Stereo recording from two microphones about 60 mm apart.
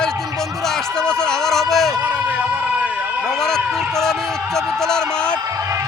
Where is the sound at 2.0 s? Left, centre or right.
Right.